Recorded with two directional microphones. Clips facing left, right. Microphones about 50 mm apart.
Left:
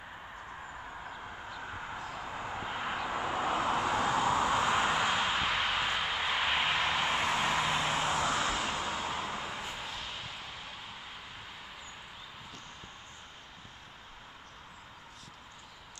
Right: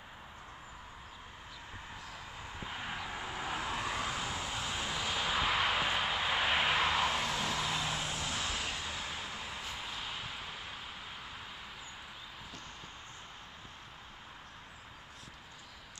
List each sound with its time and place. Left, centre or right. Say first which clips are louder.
2.7 s vehicle: left 5 dB; left
3.3 s vehicle: left 7 dB; left
4.3 s vehicle: left 11 dB; left
4.6 s vehicle: left 9 dB; left
5.0 s vehicle: left 6 dB; left
5.5 s vehicle: even; centre
7.1 s vehicle: left 4 dB; left
8.4 s vehicle: left 6 dB; left
9.9 s a sound: even; centre